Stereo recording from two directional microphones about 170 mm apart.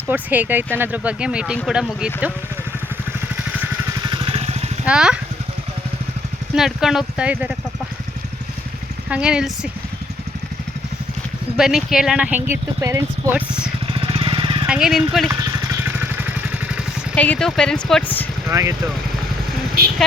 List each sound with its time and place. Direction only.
0.1 s speech: 10° right (ahead or behind)
4.0 s vehicle: 30° right (ahead or behind)
4.9 s speech: 5° right (ahead or behind)
6.6 s speech: centre (ahead or behind)
9.0 s speech: 5° right (ahead or behind)
11.5 s speech: 5° right (ahead or behind)
13.9 s vehicle: 30° right (ahead or behind)
14.7 s speech: 5° right (ahead or behind)
15.8 s vehicle: 10° right (ahead or behind)
17.2 s speech: 5° left (ahead or behind)
18.4 s speech: 15° right (ahead or behind)